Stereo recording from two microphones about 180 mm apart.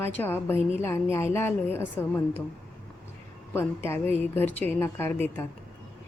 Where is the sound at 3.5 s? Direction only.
15° left (ahead or behind).